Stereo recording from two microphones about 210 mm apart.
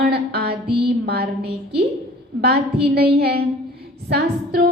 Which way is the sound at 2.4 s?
50° right (ahead or behind).